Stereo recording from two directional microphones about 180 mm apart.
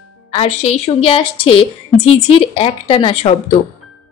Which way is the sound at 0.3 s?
35° left (ahead or behind).